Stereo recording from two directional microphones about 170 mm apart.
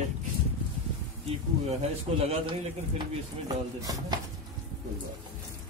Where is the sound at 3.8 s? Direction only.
20° right (ahead or behind).